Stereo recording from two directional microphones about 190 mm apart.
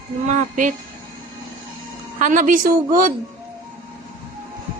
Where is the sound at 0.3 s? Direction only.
45° right (ahead or behind).